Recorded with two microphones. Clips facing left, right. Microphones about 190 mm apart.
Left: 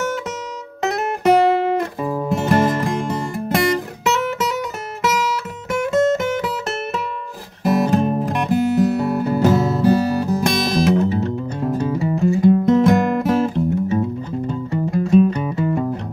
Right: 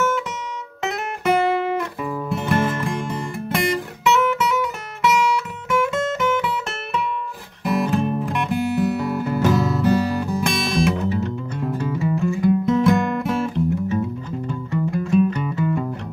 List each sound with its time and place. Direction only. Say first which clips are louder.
0.8 s guitar: left 5 dB; 40° left (ahead or behind)
2.4 s music: left 4 dB; 40° left (ahead or behind)
5.7 s music: left 5 dB; 40° left (ahead or behind)